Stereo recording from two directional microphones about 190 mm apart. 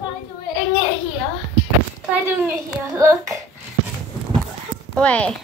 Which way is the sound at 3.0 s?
15° right (ahead or behind).